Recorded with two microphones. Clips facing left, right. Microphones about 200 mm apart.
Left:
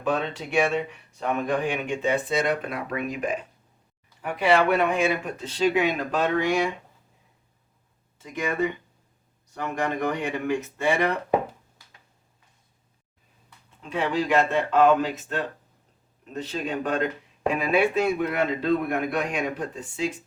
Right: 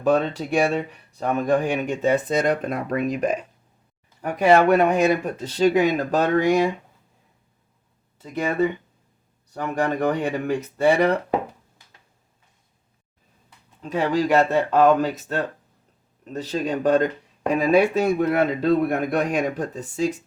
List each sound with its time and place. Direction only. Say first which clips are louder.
0.0 s speech: right 6 dB; 40° right (ahead or behind)
8.2 s speech: right 4 dB; 35° right (ahead or behind)
9.6 s speech: right 4 dB; 35° right (ahead or behind)
13.9 s speech: right 4 dB; 40° right (ahead or behind)